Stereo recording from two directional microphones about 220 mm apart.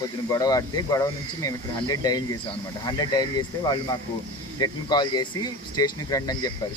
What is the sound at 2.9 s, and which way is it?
Speech, 20° left (ahead or behind).